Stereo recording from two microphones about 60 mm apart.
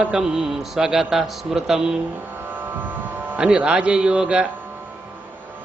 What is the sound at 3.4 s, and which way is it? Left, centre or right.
A man's voice, centre.